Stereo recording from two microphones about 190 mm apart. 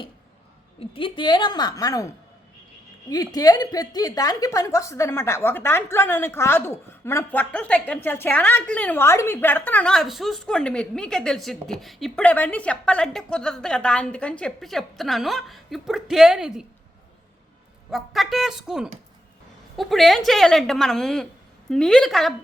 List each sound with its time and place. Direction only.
0.8 s a woman's voice: 25° left (ahead or behind)
3.1 s a woman's voice: 20° left (ahead or behind); by 16.6 s 5° right (ahead or behind)
17.9 s a woman's voice: centre (ahead or behind)